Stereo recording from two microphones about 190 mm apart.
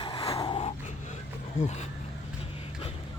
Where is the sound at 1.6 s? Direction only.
35° left (ahead or behind).